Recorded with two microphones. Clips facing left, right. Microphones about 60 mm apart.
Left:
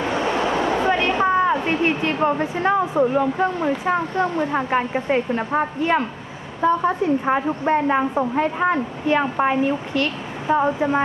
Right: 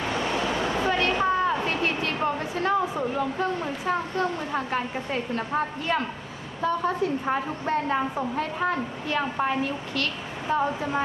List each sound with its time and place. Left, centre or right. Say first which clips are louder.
0.8 s a woman's voice: left 3 dB; left